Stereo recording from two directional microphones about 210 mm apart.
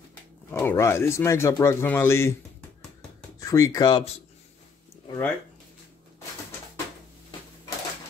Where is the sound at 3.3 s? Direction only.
15° left (ahead or behind).